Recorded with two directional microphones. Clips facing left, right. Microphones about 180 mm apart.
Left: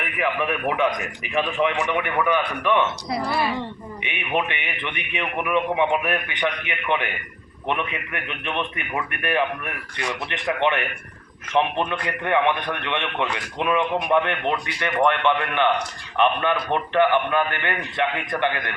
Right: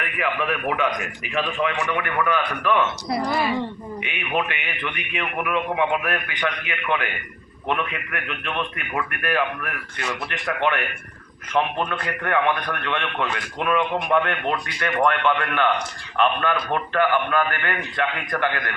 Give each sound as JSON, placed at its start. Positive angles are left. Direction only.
{"t": 0.2, "sound": "a man's voice", "side_deg": 20}
{"t": 4.4, "sound": "a man's voice", "side_deg": 20}